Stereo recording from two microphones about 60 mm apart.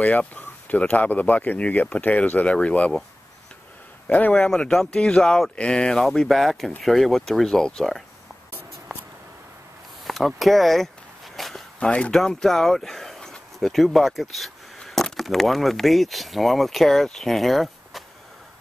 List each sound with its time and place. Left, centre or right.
0.0 s speech: left
4.3 s speech: centre
10.0 s speech: centre
11.3 s walk: centre
11.8 s speech: centre
12.1 s speech: centre